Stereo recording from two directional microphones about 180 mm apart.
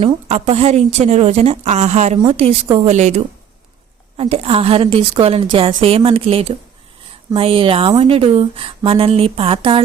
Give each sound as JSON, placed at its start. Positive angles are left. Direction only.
{"t": 0.0, "sound": "speech", "side_deg": -40}
{"t": 4.2, "sound": "speech", "side_deg": -35}